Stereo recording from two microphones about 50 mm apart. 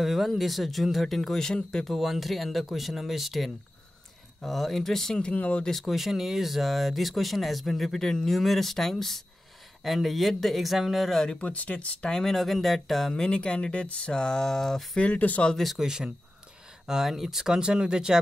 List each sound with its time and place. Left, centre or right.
0.0 s speech: centre
1.9 s speech: centre
5.3 s speech: left
5.7 s speech: centre
11.3 s speech: left
12.1 s speech: centre
13.1 s speech: centre
15.0 s speech: left
15.5 s speech: centre
15.8 s speech: centre